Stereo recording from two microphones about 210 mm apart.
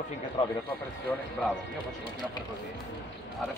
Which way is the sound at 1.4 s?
5° left (ahead or behind).